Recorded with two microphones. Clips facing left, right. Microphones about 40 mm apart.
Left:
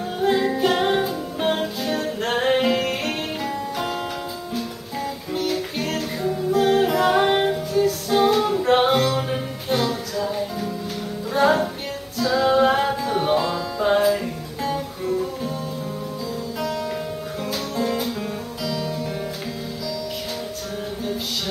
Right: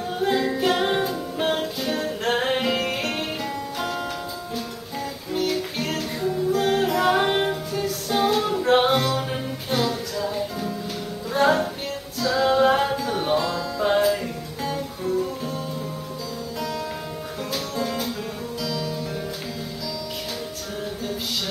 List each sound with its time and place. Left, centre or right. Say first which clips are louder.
0.2 s music: left 3 dB; centre
5.3 s music: right 1 dB; centre
16.5 s music: left 3 dB; centre